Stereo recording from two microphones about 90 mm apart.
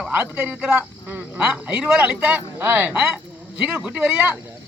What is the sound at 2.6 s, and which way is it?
Speech, 20° right (ahead or behind).